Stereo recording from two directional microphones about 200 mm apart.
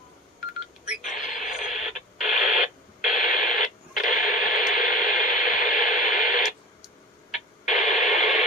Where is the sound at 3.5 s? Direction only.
40° left (ahead or behind).